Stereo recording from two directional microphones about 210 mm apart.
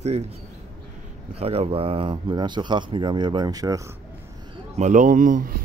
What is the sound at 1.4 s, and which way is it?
Speech, 30° right (ahead or behind).